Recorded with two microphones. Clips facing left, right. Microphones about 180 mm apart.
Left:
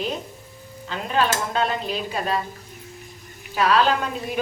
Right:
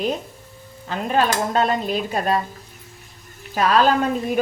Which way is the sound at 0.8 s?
45° right (ahead or behind).